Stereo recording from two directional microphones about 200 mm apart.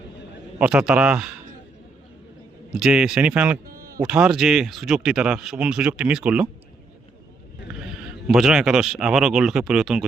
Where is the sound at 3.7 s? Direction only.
45° right (ahead or behind).